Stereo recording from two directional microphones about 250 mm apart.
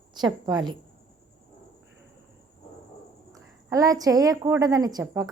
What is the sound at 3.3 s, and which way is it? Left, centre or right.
A woman's voice, centre.